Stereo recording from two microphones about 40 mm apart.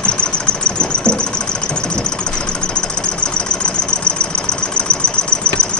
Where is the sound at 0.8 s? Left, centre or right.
Left.